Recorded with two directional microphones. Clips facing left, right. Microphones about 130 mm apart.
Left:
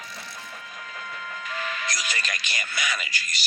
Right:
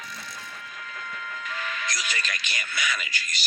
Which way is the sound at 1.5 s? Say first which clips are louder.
Left 2 dB; 35° left (ahead or behind).